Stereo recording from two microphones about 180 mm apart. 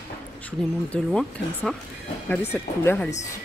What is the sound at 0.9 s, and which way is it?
A woman's voice, centre (ahead or behind).